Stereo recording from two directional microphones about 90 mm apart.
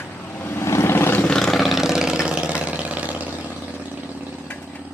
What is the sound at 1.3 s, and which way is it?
Vehicle, 5° left (ahead or behind).